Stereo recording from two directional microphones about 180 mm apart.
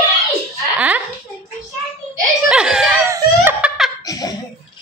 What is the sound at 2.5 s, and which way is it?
Speech, 5° right (ahead or behind).